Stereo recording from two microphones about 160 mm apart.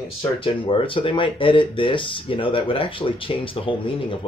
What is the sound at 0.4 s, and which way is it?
Speech, 35° left (ahead or behind).